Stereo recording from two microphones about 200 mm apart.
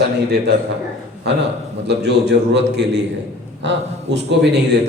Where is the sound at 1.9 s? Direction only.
55° right (ahead or behind).